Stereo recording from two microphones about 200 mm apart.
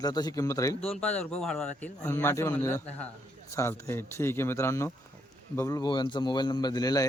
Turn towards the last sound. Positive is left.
turn(degrees=20)  # may be behind; listen again after turning